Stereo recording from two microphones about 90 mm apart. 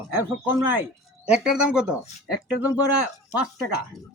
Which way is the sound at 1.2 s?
10° right (ahead or behind).